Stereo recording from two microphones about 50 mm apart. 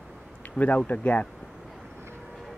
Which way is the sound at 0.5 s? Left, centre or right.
Left.